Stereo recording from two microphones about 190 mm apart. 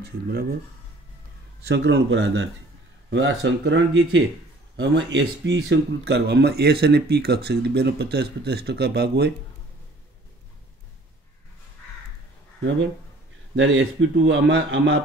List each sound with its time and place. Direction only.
0.3 s speech: 50° right (ahead or behind)
1.7 s speech: 70° right (ahead or behind)
13.6 s a man's voice: 80° right